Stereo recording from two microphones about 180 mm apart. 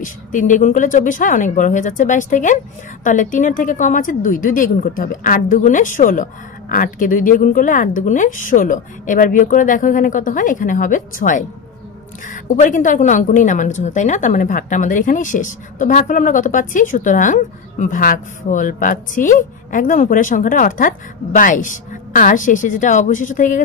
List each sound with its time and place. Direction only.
0.0 s a woman's voice: 45° left (ahead or behind)